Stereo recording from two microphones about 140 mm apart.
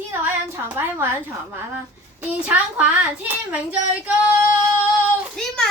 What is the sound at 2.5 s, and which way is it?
Child singing, 10° right (ahead or behind).